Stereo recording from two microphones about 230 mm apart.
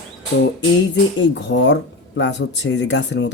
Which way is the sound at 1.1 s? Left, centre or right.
Left.